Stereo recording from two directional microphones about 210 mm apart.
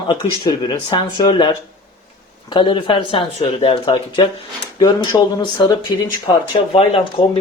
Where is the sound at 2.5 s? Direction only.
25° left (ahead or behind).